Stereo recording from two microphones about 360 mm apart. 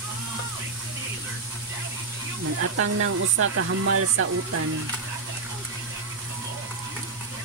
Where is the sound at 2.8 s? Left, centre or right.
Right.